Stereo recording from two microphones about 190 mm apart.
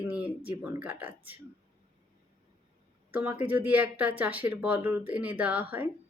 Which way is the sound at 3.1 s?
10° right (ahead or behind).